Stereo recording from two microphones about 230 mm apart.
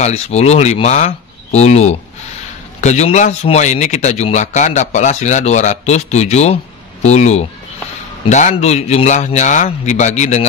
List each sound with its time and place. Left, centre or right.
0.0 s a man's voice: left